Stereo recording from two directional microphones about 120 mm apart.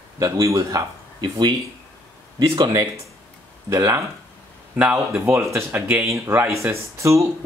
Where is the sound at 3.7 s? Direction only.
25° right (ahead or behind).